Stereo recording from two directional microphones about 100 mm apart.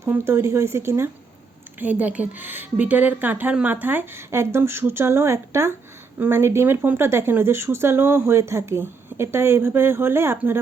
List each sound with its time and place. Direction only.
0.0 s speech: 25° right (ahead or behind)
1.8 s speech: 15° right (ahead or behind)